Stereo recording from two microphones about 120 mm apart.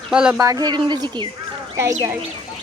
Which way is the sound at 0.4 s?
30° right (ahead or behind).